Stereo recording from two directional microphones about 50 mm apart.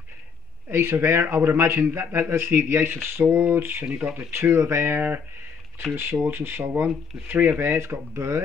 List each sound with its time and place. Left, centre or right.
0.7 s speech: right
3.8 s speech: right
4.3 s speech: right
5.9 s speech: right